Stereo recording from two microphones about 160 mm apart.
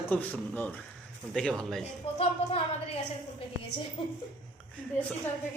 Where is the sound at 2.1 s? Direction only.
35° left (ahead or behind).